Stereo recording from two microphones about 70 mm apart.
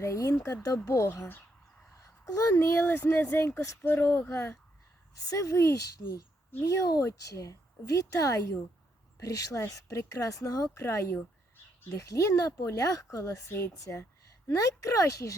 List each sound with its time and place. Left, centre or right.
0.0 s speech: left
5.2 s speech: left
10.8 s speech: left
11.2 s a sound: left
11.9 s speech: left
13.5 s speech: left